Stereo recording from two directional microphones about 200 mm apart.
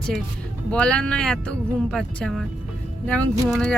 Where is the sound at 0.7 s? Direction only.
5° left (ahead or behind).